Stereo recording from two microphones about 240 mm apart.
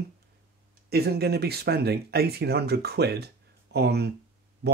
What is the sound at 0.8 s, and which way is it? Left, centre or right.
Speech, right.